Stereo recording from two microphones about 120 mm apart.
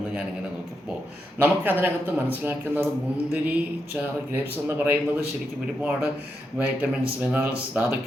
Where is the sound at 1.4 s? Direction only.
15° right (ahead or behind).